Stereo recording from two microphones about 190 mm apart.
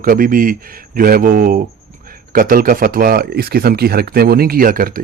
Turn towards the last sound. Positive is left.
turn(degrees=-50)  # may be behind; listen again after turning